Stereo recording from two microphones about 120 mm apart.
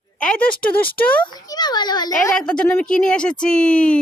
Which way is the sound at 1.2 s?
35° left (ahead or behind).